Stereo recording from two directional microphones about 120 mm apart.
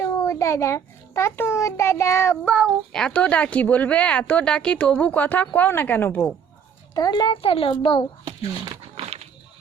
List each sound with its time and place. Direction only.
0.0 s a child's voice: 25° left (ahead or behind)
2.4 s speech: 5° left (ahead or behind)
6.9 s a child's voice: 35° left (ahead or behind)
7.4 s a child's voice: 50° left (ahead or behind)
9.0 s walk: 60° right (ahead or behind)